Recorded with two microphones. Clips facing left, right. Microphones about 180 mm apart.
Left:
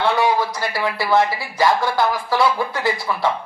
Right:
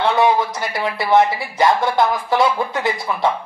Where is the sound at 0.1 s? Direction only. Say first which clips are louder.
Right 2 dB; 20° right (ahead or behind).